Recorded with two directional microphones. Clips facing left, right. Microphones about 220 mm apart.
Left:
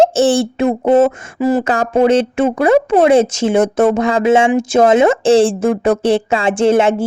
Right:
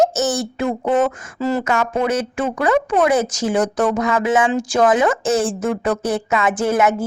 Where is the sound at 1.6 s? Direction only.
30° left (ahead or behind).